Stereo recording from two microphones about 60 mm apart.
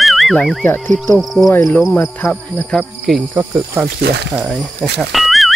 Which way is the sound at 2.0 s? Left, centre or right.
Left.